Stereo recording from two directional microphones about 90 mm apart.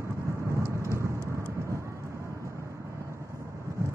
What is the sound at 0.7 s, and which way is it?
Thunder, 35° right (ahead or behind).